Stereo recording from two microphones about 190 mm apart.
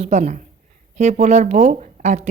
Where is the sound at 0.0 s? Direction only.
40° right (ahead or behind).